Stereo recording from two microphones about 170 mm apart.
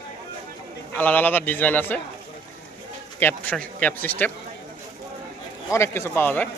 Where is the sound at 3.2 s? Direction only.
10° left (ahead or behind).